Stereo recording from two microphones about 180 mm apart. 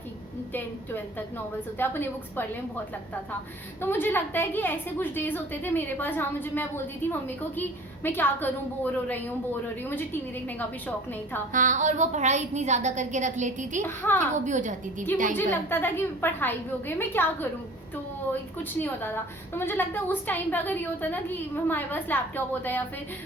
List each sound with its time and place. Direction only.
1.8 s a woman's voice: 10° left (ahead or behind)
3.8 s a woman's voice: 10° left (ahead or behind)
11.5 s a woman's voice: 45° right (ahead or behind)
13.8 s a woman's voice: 10° left (ahead or behind)
14.4 s a woman's voice: 45° right (ahead or behind)
15.1 s a woman's voice: 10° left (ahead or behind)
18.8 s a woman's voice: 10° left (ahead or behind)